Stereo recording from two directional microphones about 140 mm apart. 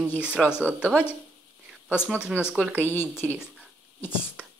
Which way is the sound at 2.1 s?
10° right (ahead or behind).